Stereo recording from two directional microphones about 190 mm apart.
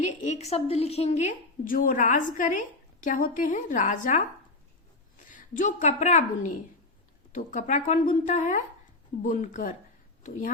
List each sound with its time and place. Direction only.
0.0 s a woman's voice: 35° left (ahead or behind)
5.3 s a woman's voice: 40° left (ahead or behind)